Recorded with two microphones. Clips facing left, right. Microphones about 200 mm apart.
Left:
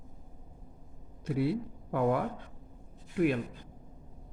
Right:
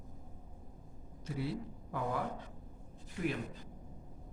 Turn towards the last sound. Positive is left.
turn(degrees=60)  # may be behind; listen again after turning